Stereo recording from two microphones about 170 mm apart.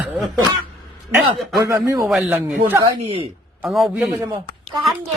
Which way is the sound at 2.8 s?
30° right (ahead or behind).